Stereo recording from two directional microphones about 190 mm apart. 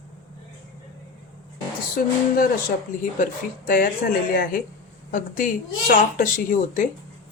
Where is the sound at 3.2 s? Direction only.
45° left (ahead or behind).